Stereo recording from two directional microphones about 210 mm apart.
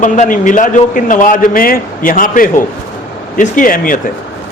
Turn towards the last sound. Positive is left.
turn(degrees=40)  # may be behind; listen again after turning